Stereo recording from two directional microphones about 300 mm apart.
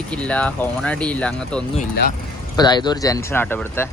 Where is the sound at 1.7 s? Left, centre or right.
Left.